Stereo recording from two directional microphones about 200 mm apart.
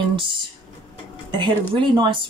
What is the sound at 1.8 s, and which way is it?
Speech, 25° right (ahead or behind).